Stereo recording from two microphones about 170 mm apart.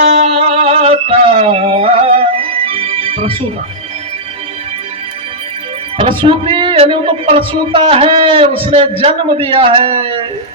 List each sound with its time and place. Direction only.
0.0 s music: 40° right (ahead or behind)
6.0 s speech: 30° right (ahead or behind)